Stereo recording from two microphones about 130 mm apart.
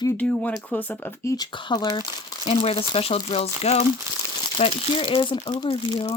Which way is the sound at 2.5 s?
50° left (ahead or behind).